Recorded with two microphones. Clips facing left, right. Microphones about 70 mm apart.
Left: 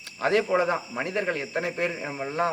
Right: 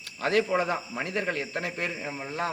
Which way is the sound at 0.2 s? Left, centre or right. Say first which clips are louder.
Left 2 dB; centre.